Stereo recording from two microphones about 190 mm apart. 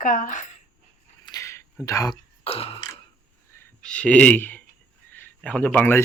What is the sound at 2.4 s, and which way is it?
Burping, 30° left (ahead or behind).